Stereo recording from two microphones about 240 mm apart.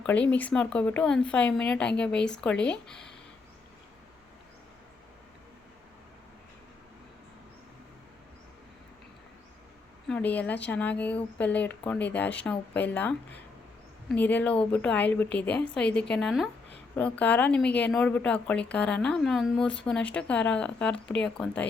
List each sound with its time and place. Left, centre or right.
0.0 s speech: centre
10.1 s speech: centre